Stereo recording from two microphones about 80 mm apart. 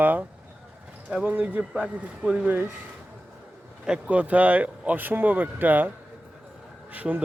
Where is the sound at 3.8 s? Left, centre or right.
Centre.